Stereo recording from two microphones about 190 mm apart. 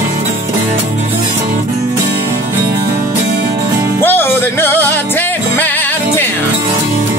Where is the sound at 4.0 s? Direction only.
10° left (ahead or behind).